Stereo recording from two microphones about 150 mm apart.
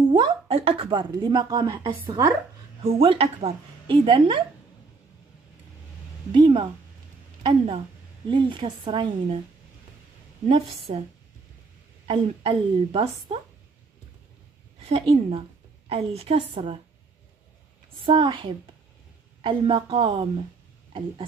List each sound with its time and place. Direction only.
0.1 s speech: 35° right (ahead or behind)
2.8 s speech: 40° right (ahead or behind)
6.3 s speech: 35° right (ahead or behind)
10.5 s speech: 40° right (ahead or behind)
12.1 s speech: 35° right (ahead or behind)
14.8 s speech: 40° right (ahead or behind)
17.9 s speech: 35° right (ahead or behind)